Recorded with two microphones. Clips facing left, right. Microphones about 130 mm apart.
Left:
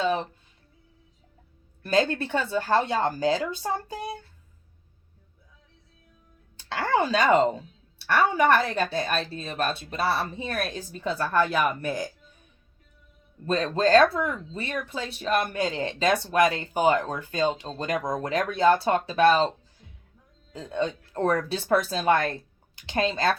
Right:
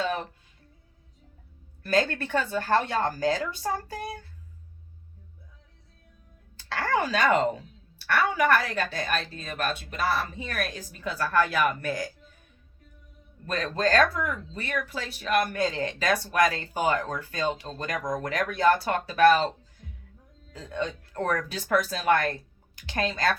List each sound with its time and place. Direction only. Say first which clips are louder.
0.0 s music: left 4 dB; 25° left (ahead or behind)
1.8 s speech: left 2 dB; 25° left (ahead or behind)
6.6 s speech: left 2 dB; 25° left (ahead or behind)
13.4 s speech: left 4 dB; 25° left (ahead or behind)